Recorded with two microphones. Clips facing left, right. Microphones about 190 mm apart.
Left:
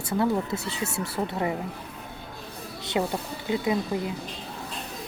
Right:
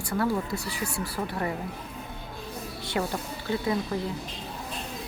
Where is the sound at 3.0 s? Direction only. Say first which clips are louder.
Left 3 dB; 20° left (ahead or behind).